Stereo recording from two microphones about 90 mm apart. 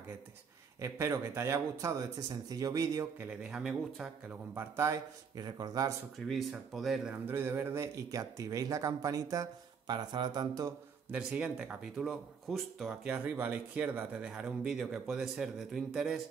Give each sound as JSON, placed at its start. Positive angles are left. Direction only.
{"t": 0.7, "sound": "speech", "side_deg": -30}
{"t": 3.3, "sound": "speech", "side_deg": -10}
{"t": 4.3, "sound": "speech", "side_deg": -30}
{"t": 5.4, "sound": "speech", "side_deg": -50}
{"t": 6.1, "sound": "speech", "side_deg": 0}
{"t": 7.2, "sound": "speech", "side_deg": -25}
{"t": 11.1, "sound": "speech", "side_deg": -15}
{"t": 13.1, "sound": "speech", "side_deg": -20}
{"t": 14.2, "sound": "speech", "side_deg": -5}